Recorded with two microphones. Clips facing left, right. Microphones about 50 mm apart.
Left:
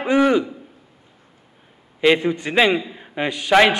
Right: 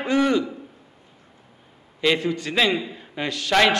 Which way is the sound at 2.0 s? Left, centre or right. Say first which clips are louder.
Left 5 dB; left.